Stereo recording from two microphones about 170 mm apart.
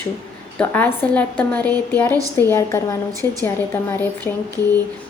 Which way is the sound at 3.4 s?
15° left (ahead or behind).